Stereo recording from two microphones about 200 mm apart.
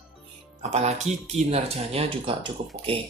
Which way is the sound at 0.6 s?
35° right (ahead or behind).